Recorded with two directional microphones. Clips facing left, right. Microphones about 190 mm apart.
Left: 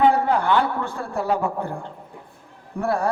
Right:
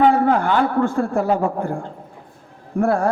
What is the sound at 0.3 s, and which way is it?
A man's voice, 50° right (ahead or behind).